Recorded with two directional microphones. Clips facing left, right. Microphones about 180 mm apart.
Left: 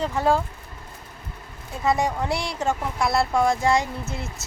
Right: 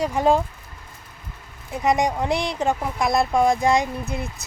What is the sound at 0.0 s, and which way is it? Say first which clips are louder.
Speech: right 3 dB; 15° right (ahead or behind).